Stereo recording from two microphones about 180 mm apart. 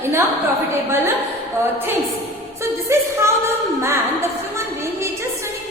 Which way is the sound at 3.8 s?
15° right (ahead or behind).